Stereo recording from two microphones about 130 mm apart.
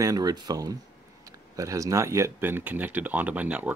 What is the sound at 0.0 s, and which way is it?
Speech, 30° right (ahead or behind).